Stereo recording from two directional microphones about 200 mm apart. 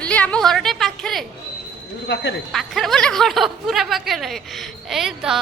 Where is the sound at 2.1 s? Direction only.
60° left (ahead or behind).